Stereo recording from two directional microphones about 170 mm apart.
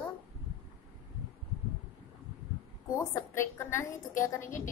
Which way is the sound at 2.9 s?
15° left (ahead or behind).